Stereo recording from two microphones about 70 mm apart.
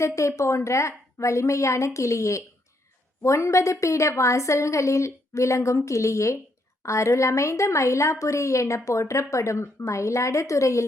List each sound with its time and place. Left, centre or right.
0.0 s speech: left